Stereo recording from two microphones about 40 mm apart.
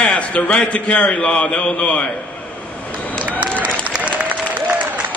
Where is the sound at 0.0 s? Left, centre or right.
Left.